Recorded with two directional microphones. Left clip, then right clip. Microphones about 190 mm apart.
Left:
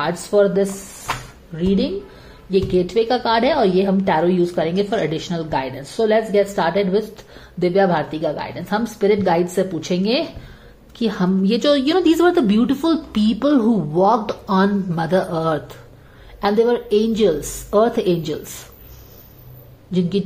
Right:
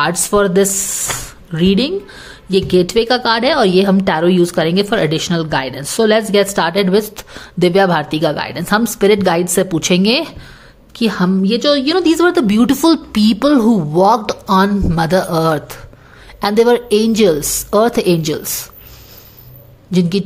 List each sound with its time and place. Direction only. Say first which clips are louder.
0.0 s a woman's voice: right 3 dB; 35° right (ahead or behind)
19.9 s a woman's voice: right 4 dB; 20° right (ahead or behind)